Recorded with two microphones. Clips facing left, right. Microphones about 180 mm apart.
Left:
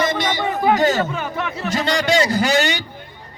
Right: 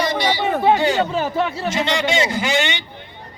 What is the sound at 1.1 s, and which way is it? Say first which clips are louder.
Speech: right 5 dB; 30° right (ahead or behind).